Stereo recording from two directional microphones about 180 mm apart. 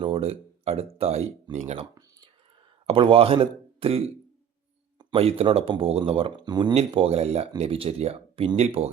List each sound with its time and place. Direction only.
0.0 s speech: 35° right (ahead or behind)